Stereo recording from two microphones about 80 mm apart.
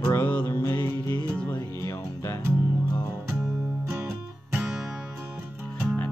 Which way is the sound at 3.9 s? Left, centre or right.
Right.